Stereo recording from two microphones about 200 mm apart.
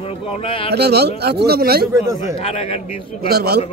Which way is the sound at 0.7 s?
55° right (ahead or behind).